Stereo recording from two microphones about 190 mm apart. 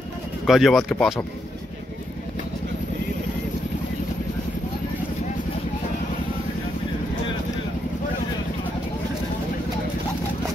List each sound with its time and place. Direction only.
0.5 s speech: centre (ahead or behind)